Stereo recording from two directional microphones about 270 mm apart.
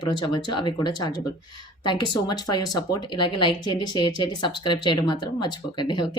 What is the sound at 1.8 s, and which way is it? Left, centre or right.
Speech, centre.